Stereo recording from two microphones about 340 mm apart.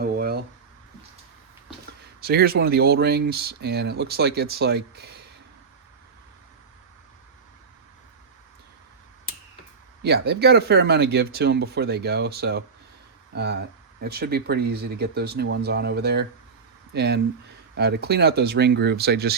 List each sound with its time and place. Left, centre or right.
0.0 s a sound: right
2.2 s speech: right
10.0 s speech: right